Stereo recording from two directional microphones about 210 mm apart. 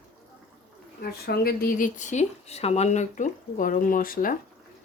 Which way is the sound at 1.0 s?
45° left (ahead or behind).